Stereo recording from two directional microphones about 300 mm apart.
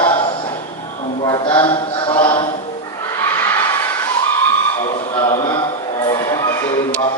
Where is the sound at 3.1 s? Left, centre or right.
Centre.